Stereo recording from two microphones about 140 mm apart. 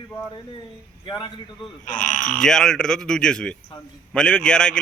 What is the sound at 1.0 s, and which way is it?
Speech, 35° left (ahead or behind).